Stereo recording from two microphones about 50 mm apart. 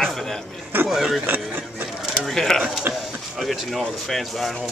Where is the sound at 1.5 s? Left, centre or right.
Right.